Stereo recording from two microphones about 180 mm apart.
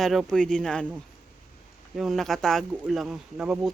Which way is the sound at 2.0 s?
Centre (ahead or behind).